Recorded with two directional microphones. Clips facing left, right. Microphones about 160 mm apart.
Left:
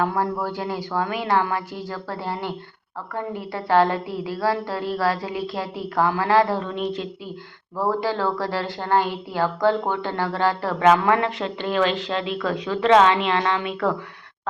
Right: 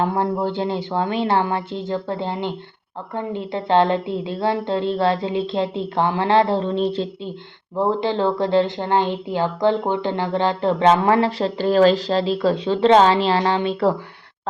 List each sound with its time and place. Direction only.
0.0 s speech: 25° right (ahead or behind)